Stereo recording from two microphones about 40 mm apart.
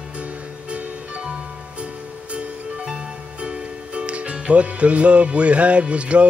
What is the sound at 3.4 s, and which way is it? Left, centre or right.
Music, right.